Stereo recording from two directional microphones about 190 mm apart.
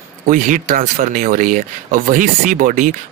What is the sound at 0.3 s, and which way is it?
Speech, 45° right (ahead or behind).